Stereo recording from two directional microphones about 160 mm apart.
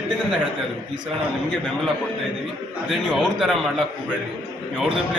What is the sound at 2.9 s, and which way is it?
Speech, centre (ahead or behind).